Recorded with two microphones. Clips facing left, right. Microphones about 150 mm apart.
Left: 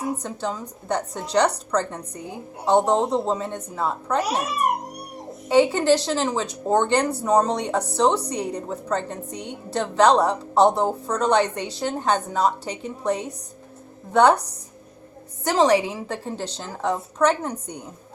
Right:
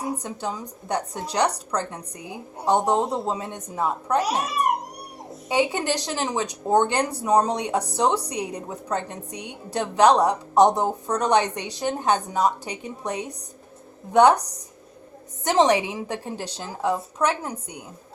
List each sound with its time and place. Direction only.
0.2 s a woman's voice: 15° right (ahead or behind)
5.5 s a woman's voice: 15° right (ahead or behind)
15.4 s a woman's voice: 20° right (ahead or behind)